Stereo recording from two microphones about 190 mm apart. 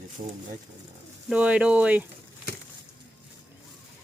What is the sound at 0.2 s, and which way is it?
Speech, 30° right (ahead or behind).